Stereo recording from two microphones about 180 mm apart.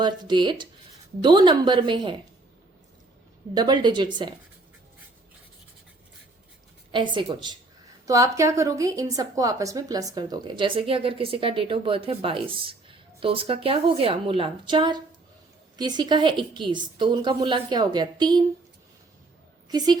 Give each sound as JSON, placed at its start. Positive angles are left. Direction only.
{"t": 0.0, "sound": "a woman's voice", "side_deg": -25}
{"t": 3.5, "sound": "a woman's voice", "side_deg": -25}
{"t": 6.9, "sound": "a woman's voice", "side_deg": -25}
{"t": 19.7, "sound": "a woman's voice", "side_deg": -25}